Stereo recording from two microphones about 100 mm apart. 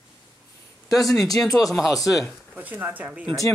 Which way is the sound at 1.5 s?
35° left (ahead or behind).